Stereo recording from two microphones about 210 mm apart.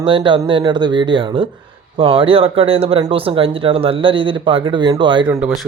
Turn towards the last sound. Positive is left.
turn(degrees=-5)  # may be behind; listen again after turning